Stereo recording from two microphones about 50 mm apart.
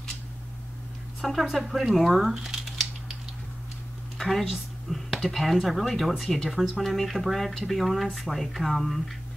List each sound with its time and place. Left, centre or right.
1.2 s speech: centre
4.2 s speech: centre